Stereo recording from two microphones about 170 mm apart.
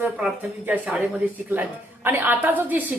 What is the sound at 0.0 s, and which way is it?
A woman's voice, 10° right (ahead or behind).